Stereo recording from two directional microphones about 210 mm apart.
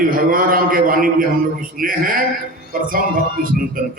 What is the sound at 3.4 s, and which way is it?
Speech, 40° right (ahead or behind).